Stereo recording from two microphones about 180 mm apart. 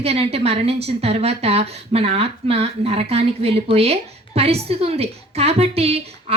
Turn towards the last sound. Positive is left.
turn(degrees=-35)  # may be behind; listen again after turning